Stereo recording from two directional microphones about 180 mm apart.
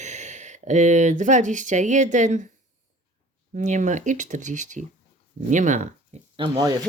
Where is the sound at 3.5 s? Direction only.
45° right (ahead or behind).